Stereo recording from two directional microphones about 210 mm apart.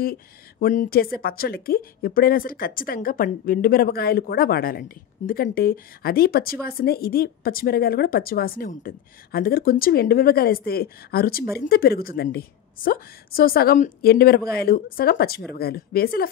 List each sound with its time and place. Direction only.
0.0 s speech: 45° left (ahead or behind)